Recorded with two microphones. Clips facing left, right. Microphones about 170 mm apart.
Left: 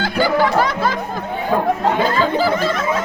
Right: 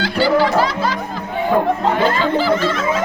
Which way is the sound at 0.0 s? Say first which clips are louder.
Right 1 dB; 50° left (ahead or behind).